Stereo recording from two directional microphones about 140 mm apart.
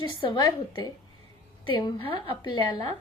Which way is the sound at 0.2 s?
35° left (ahead or behind).